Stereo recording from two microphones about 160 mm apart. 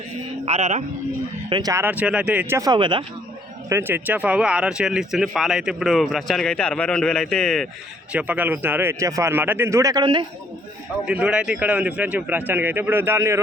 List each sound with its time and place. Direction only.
0.4 s speech: 45° right (ahead or behind)
1.5 s speech: 25° right (ahead or behind); by 2.6 s 10° right (ahead or behind)
2.6 s speech: 25° right (ahead or behind)
3.7 s speech: 15° right (ahead or behind); by 7.7 s centre (ahead or behind)
8.1 s speech: 10° right (ahead or behind); by 10.2 s 30° right (ahead or behind)
11.0 s speech: 5° right (ahead or behind)